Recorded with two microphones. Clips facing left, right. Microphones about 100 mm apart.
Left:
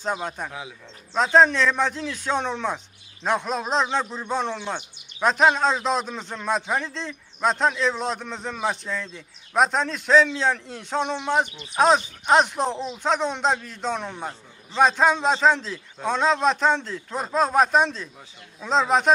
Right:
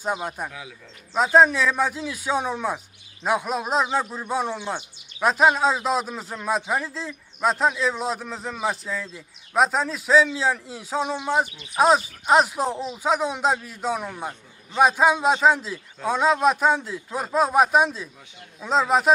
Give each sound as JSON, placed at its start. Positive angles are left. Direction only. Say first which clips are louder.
{"t": 0.0, "sound": "speech", "louder": "even", "side_deg": -10}
{"t": 0.5, "sound": "speech", "louder": "left 3 dB", "side_deg": 25}
{"t": 1.1, "sound": "speech", "louder": "even", "side_deg": -5}